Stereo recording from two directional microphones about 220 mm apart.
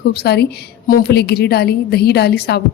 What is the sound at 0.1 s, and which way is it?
A woman's voice, 45° left (ahead or behind).